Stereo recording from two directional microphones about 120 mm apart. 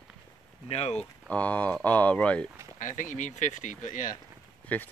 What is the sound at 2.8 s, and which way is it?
Speech, 90° left.